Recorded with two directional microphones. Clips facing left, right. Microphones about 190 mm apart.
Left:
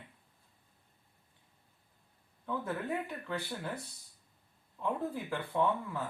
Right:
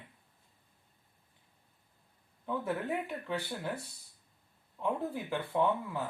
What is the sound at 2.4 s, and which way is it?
Speech, 15° right (ahead or behind).